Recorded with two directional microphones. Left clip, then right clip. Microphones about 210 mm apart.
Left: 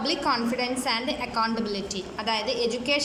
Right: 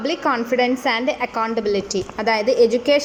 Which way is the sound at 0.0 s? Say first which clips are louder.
Right 5 dB; 15° right (ahead or behind).